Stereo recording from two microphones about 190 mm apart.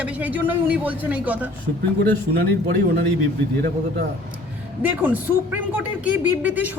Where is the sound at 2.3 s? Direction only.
55° right (ahead or behind).